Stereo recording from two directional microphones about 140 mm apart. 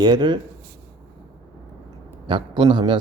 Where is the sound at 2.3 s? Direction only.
35° right (ahead or behind).